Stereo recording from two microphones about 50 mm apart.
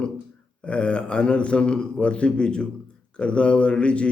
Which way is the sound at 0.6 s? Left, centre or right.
Left.